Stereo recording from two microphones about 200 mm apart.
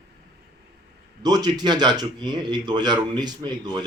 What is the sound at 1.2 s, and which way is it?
A man's voice, 20° right (ahead or behind).